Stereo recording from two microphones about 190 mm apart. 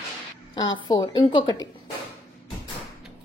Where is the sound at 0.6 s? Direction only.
90° left.